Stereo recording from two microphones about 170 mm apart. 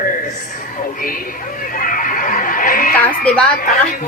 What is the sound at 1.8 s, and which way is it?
Chicken, 55° left (ahead or behind).